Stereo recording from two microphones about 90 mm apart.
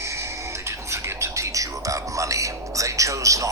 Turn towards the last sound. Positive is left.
turn(degrees=-35)  # may be behind; listen again after turning